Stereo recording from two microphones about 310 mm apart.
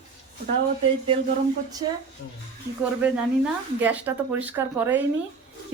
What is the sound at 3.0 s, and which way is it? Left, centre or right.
Speech, centre.